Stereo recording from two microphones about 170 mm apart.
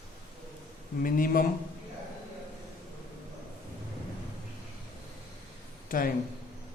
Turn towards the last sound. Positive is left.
turn(degrees=55)  # may be behind; listen again after turning